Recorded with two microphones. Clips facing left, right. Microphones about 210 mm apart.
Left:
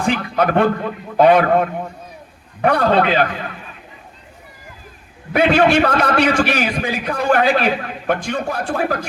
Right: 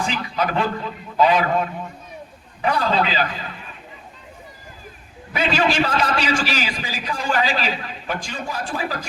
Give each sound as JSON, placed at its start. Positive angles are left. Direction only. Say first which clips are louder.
{"t": 0.0, "sound": "a man's voice", "louder": "left 6 dB", "side_deg": 55}
{"t": 5.3, "sound": "a man's voice", "louder": "left 7 dB", "side_deg": 60}